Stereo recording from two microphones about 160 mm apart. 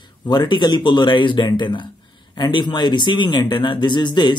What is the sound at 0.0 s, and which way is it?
Speech, 30° left (ahead or behind).